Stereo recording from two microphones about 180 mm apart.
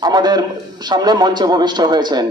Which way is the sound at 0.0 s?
25° right (ahead or behind).